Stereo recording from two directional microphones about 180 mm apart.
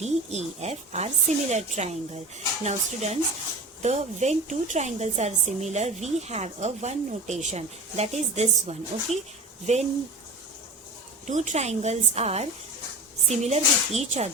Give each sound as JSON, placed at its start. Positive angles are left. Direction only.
{"t": 0.0, "sound": "a woman's voice", "side_deg": -40}
{"t": 11.3, "sound": "a woman's voice", "side_deg": -40}